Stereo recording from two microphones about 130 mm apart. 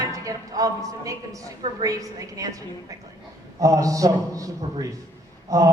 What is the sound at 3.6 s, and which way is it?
A man's voice, 25° right (ahead or behind).